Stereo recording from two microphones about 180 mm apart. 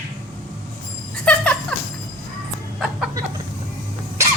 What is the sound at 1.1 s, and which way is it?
Music, 5° left (ahead or behind).